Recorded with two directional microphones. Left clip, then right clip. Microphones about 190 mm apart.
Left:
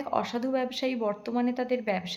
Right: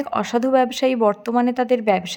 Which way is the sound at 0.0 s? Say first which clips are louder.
Right 8 dB; 45° right (ahead or behind).